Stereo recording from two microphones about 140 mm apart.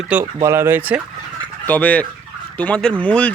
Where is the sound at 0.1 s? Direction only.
10° right (ahead or behind).